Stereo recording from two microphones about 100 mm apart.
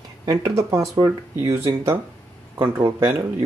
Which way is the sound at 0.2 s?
35° right (ahead or behind).